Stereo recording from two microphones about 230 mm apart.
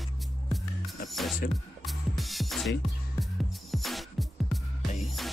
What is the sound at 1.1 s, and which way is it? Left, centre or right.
Music, centre.